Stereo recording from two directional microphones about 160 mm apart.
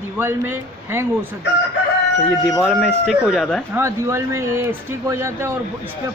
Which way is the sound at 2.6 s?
5° left (ahead or behind).